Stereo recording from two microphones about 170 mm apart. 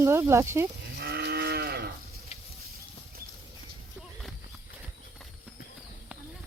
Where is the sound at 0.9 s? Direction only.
70° right (ahead or behind).